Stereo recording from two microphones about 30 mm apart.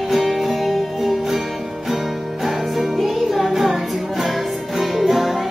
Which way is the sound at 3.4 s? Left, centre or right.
Centre.